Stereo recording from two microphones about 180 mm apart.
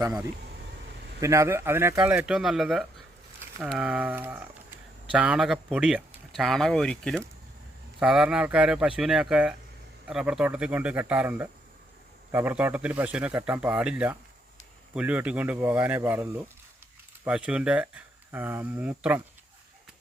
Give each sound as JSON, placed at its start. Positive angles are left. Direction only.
{"t": 0.0, "sound": "speech", "side_deg": -15}